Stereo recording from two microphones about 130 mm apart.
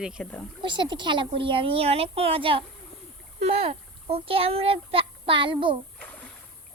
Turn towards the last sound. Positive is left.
turn(degrees=10)  # may be behind; listen again after turning